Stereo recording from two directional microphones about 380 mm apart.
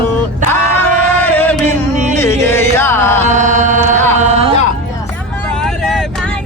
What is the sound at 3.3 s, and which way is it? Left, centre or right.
Music, centre.